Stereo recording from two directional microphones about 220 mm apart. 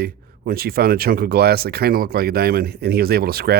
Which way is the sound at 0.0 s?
45° right (ahead or behind).